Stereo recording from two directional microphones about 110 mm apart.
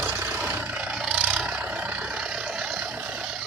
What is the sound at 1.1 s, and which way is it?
Vehicle, 10° right (ahead or behind).